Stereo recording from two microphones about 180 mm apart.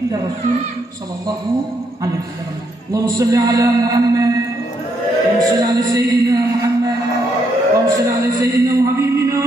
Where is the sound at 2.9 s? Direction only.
20° right (ahead or behind).